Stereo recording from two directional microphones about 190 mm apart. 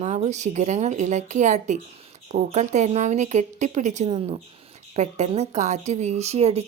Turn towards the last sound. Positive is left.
turn(degrees=-35)  # may be behind; listen again after turning